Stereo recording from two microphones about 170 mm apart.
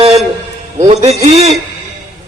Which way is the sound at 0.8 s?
40° right (ahead or behind).